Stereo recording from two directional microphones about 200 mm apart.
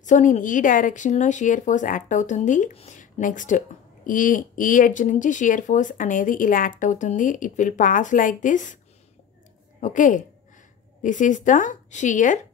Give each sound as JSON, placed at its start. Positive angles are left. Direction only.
{"t": 0.0, "sound": "speech", "side_deg": 40}
{"t": 9.8, "sound": "speech", "side_deg": 40}